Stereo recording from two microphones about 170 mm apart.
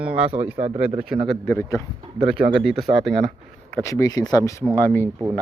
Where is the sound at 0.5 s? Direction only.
35° right (ahead or behind).